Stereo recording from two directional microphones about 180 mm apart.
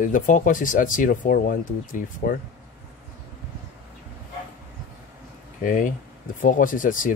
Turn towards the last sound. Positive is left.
turn(degrees=50)  # may be behind; listen again after turning